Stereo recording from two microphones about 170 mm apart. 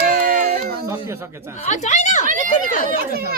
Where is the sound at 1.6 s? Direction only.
45° left (ahead or behind).